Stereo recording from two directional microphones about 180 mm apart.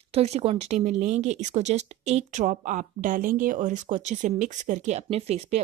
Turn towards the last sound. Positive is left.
turn(degrees=-35)  # may be behind; listen again after turning